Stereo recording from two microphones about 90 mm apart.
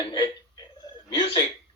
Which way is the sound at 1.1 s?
70° left (ahead or behind).